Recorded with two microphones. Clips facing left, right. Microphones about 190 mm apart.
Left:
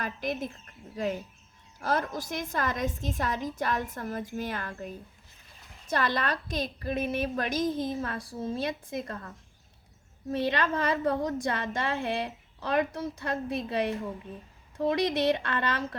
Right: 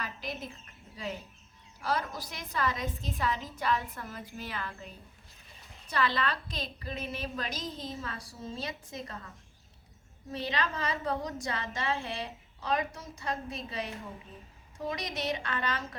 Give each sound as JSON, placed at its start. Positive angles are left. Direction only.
{"t": 0.0, "sound": "a woman's voice", "side_deg": 50}
{"t": 10.3, "sound": "a woman's voice", "side_deg": 55}